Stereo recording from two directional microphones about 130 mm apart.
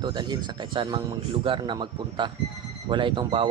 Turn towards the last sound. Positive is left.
turn(degrees=-40)  # may be behind; listen again after turning